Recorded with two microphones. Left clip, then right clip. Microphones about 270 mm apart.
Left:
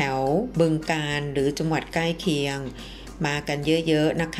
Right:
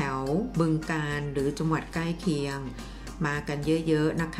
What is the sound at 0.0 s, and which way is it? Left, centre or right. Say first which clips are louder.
Speech: left 6 dB; centre.